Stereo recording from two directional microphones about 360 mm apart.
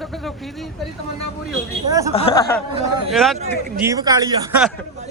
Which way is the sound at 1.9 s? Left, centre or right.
Centre.